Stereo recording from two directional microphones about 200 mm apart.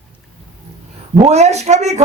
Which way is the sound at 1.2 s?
35° right (ahead or behind).